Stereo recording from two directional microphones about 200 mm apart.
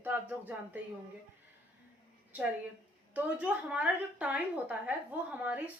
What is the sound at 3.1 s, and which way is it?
Speech, 5° right (ahead or behind).